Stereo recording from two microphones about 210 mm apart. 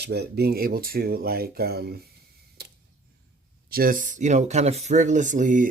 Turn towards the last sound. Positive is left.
turn(degrees=-40)  # may be behind; listen again after turning